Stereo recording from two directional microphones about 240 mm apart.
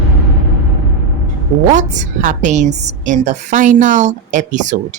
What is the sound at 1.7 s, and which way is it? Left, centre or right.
A woman's voice, right.